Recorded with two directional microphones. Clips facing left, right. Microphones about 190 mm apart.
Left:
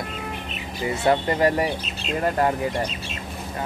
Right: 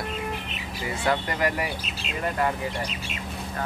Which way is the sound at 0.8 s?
25° left (ahead or behind).